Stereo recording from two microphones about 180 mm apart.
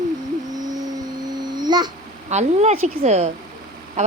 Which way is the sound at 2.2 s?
40° right (ahead or behind).